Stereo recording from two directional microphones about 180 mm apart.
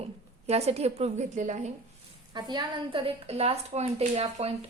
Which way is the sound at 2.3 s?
25° right (ahead or behind).